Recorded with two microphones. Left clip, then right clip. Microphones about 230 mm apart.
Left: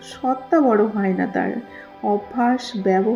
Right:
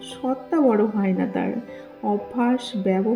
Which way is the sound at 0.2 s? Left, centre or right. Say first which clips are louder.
Left 3 dB; centre.